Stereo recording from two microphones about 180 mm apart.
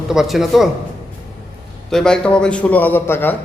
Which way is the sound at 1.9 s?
5° left (ahead or behind).